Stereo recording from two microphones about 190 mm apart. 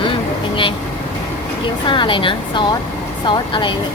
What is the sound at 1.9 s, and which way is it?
Speech, 25° left (ahead or behind).